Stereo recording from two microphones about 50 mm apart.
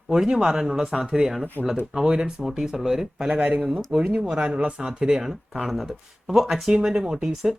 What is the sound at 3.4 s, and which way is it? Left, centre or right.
Speech, right.